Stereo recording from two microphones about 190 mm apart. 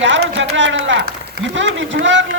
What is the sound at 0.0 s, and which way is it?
A man's voice, 70° right (ahead or behind).